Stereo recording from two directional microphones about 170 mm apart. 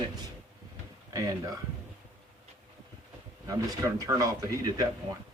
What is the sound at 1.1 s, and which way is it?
Speech, 20° right (ahead or behind).